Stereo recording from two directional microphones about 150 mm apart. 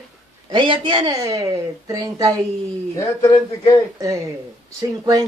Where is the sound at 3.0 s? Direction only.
25° left (ahead or behind).